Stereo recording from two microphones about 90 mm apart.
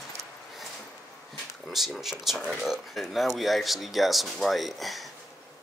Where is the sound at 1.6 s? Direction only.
Centre (ahead or behind).